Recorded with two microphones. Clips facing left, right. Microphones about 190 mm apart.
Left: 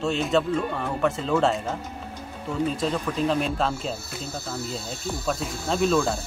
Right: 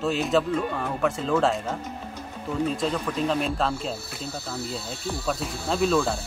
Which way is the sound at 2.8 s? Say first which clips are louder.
Left 1 dB; centre (ahead or behind).